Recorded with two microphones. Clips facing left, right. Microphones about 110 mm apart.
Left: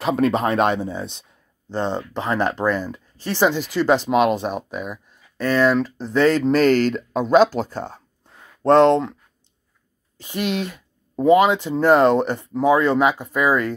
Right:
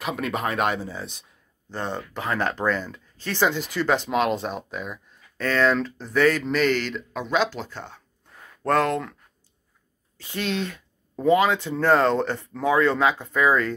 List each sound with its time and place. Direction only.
0.0 s speech: 30° left (ahead or behind)
8.6 s speech: 25° left (ahead or behind)
10.1 s speech: 15° left (ahead or behind)